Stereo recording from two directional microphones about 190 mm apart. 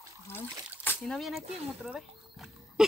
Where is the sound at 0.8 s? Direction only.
5° left (ahead or behind).